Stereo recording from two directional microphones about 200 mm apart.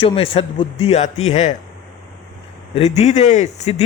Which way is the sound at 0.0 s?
25° left (ahead or behind).